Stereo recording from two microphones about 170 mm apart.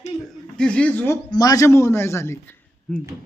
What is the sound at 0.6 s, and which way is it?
Speech, 5° left (ahead or behind).